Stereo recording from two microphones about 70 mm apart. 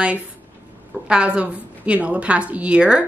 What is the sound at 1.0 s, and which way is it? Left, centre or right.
A woman's voice, centre.